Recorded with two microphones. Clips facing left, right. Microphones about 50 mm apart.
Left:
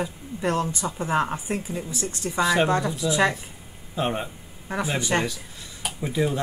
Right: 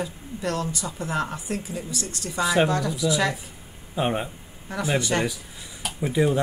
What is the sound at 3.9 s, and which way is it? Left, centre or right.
Speech, centre.